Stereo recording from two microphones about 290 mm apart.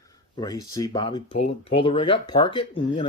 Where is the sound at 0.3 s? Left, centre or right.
Centre.